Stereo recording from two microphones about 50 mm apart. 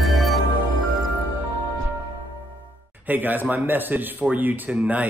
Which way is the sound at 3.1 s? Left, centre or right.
Right.